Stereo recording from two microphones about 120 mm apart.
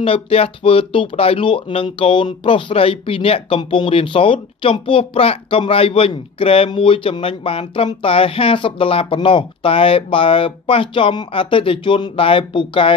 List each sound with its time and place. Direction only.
0.0 s speech: 50° left (ahead or behind)